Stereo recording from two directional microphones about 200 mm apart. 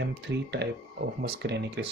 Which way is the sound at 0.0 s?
60° right (ahead or behind).